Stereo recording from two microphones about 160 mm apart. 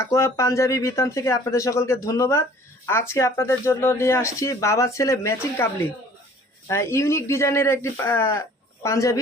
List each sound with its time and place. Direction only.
0.0 s speech: 20° left (ahead or behind)
6.7 s speech: 15° left (ahead or behind)